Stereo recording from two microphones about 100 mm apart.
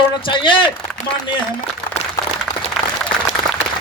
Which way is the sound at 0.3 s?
55° left (ahead or behind).